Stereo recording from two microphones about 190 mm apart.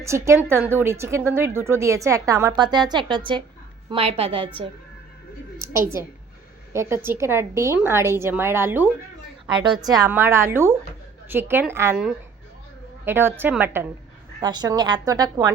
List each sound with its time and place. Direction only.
0.0 s a woman's voice: 15° right (ahead or behind)
6.7 s a woman's voice: 15° right (ahead or behind)
9.6 s a woman's voice: 20° right (ahead or behind)
13.1 s a woman's voice: 10° right (ahead or behind)
14.4 s a woman's voice: 20° right (ahead or behind)